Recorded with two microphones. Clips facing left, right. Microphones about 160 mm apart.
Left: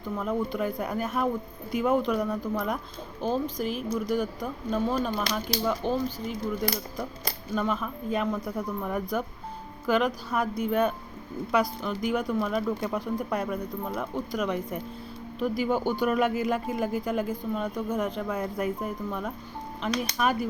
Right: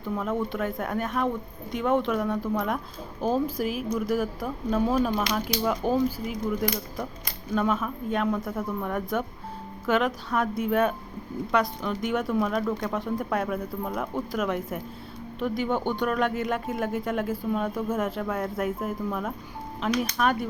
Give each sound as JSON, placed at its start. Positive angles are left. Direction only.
{"t": 0.0, "sound": "speech", "side_deg": 0}
{"t": 7.5, "sound": "speech", "side_deg": 0}